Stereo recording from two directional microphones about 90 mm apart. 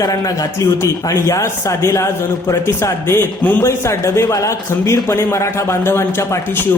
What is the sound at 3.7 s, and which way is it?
Speech, 30° left (ahead or behind).